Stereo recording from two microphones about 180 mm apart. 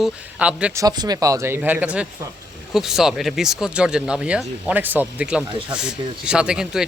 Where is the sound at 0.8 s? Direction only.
20° right (ahead or behind).